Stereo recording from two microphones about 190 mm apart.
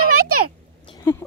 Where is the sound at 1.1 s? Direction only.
10° left (ahead or behind).